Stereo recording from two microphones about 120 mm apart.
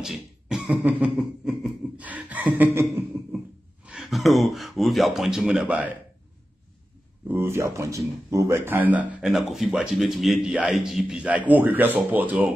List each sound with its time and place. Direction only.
0.0 s cough: 5° right (ahead or behind)
2.0 s a sound: 10° right (ahead or behind)
3.8 s speech: 5° right (ahead or behind)
7.2 s speech: 20° right (ahead or behind)
9.3 s a man's voice: centre (ahead or behind)